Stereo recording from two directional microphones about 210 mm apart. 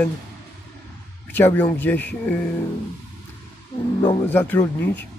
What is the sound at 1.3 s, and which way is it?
Speech, 10° left (ahead or behind).